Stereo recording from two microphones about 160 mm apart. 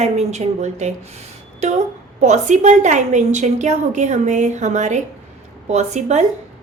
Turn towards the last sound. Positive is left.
turn(degrees=-45)  # may be behind; listen again after turning